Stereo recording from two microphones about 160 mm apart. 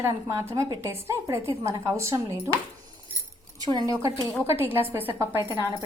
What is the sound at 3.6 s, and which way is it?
A woman's voice, 25° right (ahead or behind).